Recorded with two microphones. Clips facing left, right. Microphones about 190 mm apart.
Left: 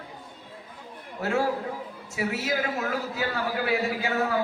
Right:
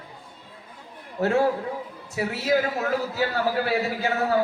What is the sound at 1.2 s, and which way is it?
Speech, 35° right (ahead or behind).